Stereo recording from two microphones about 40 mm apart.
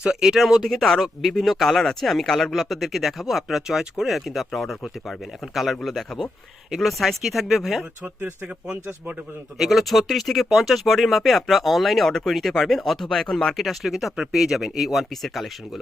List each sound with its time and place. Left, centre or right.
0.1 s speech: centre
8.0 s speech: right
9.6 s speech: centre
13.6 s speech: centre